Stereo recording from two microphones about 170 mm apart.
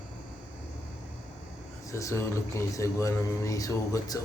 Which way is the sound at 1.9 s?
20° left (ahead or behind).